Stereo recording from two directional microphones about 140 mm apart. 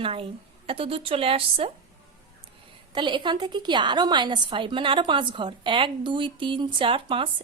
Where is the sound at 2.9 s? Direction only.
35° right (ahead or behind).